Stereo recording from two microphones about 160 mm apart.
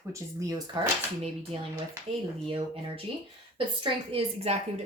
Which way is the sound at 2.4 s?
35° right (ahead or behind).